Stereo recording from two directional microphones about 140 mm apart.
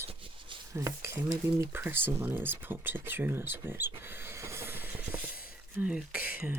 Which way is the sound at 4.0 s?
15° right (ahead or behind).